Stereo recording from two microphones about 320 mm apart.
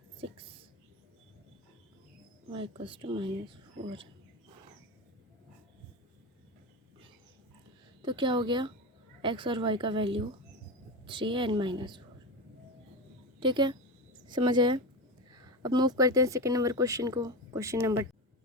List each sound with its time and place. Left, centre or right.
2.5 s speech: centre
8.0 s speech: centre
13.4 s speech: centre